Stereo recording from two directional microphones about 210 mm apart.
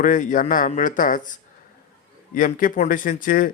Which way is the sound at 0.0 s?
40° left (ahead or behind).